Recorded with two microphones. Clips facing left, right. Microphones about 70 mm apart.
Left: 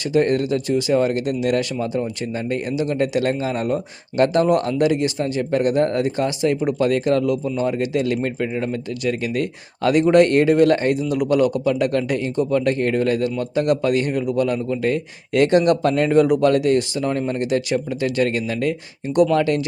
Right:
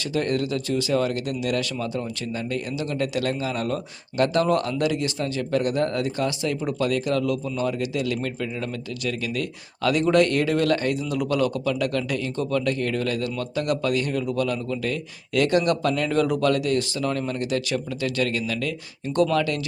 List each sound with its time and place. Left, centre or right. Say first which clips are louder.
0.1 s a man's voice: left 7 dB; left
16.1 s a man's voice: left 7 dB; left